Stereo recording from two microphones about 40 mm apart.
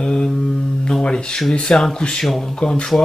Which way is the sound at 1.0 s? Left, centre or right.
Left.